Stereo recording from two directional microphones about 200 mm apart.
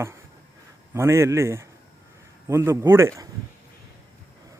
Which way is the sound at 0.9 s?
15° right (ahead or behind).